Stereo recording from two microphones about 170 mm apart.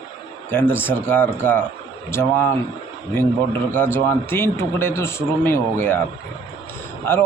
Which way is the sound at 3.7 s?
10° left (ahead or behind).